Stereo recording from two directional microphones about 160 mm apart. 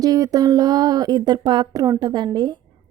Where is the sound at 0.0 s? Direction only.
25° right (ahead or behind).